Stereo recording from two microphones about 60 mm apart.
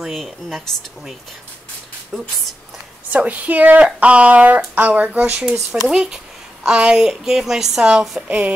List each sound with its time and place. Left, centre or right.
0.0 s speech: centre
2.1 s speech: centre
3.1 s speech: right
5.4 s a woman's voice: centre
8.3 s speech: right